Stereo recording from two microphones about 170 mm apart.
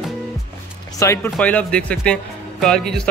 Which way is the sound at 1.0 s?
15° left (ahead or behind).